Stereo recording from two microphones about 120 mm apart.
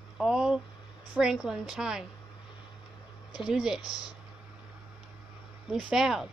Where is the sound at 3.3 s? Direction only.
5° right (ahead or behind).